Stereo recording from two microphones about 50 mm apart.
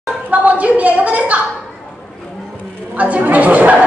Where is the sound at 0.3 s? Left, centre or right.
Right.